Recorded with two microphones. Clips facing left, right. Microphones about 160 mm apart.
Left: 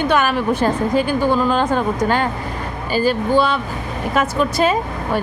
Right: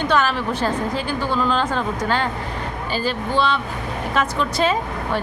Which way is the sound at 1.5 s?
10° left (ahead or behind).